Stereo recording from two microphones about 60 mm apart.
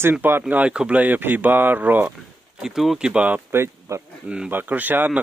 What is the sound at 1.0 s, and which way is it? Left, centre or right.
Speech, right.